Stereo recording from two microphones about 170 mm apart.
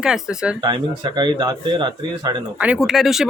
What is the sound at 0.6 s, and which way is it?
Speech, 25° right (ahead or behind).